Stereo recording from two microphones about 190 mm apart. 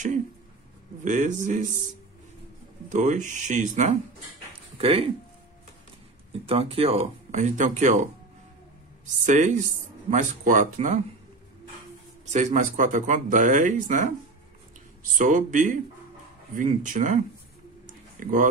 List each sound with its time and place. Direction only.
1.0 s speech: 40° right (ahead or behind)
2.9 s speech: 40° right (ahead or behind)
6.4 s speech: 30° right (ahead or behind)
12.3 s speech: 40° right (ahead or behind)
15.1 s speech: 45° right (ahead or behind)
17.8 s a sound: 45° right (ahead or behind)